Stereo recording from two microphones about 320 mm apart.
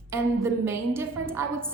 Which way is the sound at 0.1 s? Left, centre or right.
Centre.